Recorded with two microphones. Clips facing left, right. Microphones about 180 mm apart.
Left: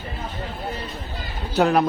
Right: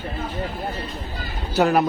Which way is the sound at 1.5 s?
Centre (ahead or behind).